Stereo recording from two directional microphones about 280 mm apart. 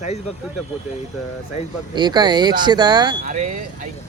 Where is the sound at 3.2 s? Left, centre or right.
Right.